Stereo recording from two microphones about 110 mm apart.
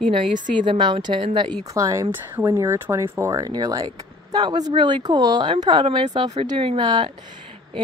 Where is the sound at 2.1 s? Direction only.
20° right (ahead or behind); by 6.0 s 45° right (ahead or behind).